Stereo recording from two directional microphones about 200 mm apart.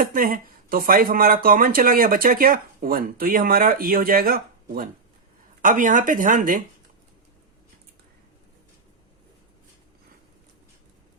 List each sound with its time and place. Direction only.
0.0 s speech: 45° right (ahead or behind)